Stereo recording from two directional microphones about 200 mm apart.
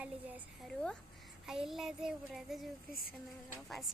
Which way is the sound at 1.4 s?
Centre (ahead or behind).